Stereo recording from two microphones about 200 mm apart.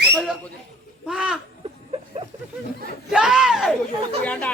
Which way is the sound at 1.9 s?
30° right (ahead or behind).